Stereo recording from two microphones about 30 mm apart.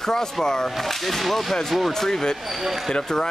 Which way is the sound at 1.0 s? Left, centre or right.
Centre.